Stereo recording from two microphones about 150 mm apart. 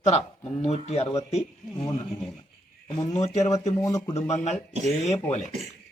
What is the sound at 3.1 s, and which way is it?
Speech, 50° left (ahead or behind).